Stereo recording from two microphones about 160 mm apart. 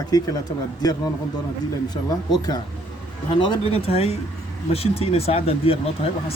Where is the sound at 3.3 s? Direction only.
30° left (ahead or behind).